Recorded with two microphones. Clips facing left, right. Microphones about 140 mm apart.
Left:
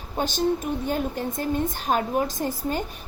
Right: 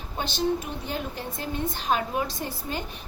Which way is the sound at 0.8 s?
50° left (ahead or behind).